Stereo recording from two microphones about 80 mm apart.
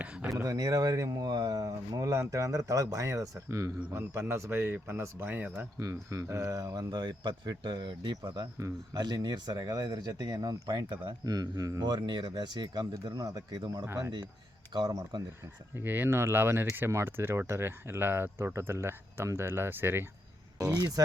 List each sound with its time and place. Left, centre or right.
0.0 s a sound: centre
0.3 s a man's voice: right
5.8 s speech: right
6.7 s speech: right
8.5 s speech: right
9.0 s speech: right
13.8 s speech: right
14.7 s speech: right
15.7 s a man's voice: right
20.7 s speech: right